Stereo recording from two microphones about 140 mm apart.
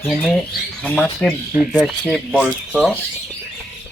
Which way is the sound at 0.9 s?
10° left (ahead or behind).